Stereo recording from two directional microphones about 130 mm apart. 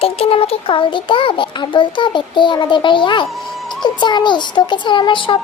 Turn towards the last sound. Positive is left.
turn(degrees=40)  # may be behind; listen again after turning